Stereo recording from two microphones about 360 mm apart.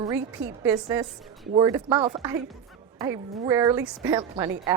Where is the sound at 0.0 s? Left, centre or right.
Centre.